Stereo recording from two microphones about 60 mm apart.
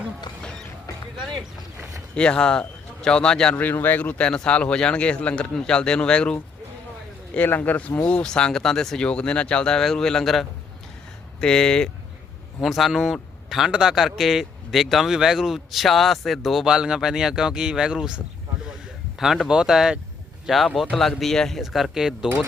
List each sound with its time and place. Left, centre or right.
2.1 s speech: centre
3.5 s speech: left; by 6.4 s centre
7.3 s speech: left; by 9.0 s centre
9.0 s speech: centre
12.6 s a man's voice: centre
19.2 s a man's voice: centre
20.9 s a man's voice: centre